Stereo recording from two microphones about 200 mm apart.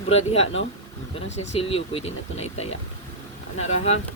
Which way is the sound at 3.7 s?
30° left (ahead or behind).